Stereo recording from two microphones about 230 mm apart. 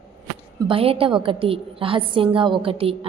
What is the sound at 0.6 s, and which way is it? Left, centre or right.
A woman's voice, right.